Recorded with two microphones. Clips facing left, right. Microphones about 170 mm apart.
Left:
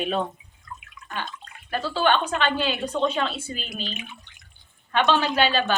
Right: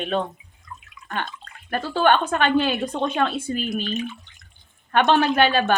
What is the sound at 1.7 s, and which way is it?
Speech, 55° right (ahead or behind).